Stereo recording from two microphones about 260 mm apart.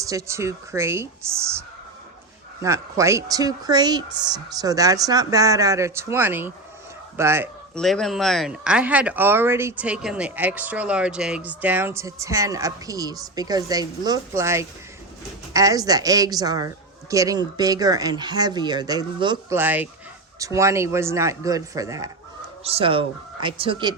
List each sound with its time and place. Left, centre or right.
0.0 s speech: centre
2.6 s speech: centre
7.8 s speech: centre